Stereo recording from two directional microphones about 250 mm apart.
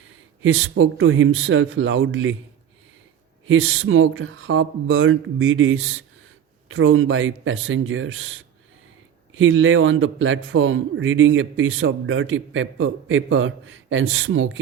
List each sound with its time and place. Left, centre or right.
0.4 s a man's voice: right
3.4 s a man's voice: right
9.4 s a man's voice: right